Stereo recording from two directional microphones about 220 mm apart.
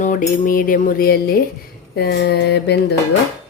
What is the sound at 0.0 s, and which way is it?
Speech, 35° left (ahead or behind).